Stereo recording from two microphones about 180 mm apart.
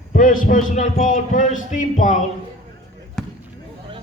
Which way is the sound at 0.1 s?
50° left (ahead or behind).